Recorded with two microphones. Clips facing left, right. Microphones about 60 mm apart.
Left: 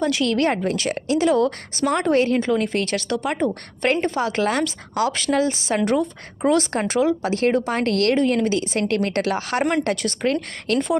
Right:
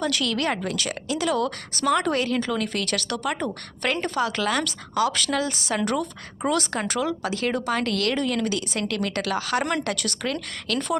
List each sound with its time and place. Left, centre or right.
0.0 s a woman's voice: left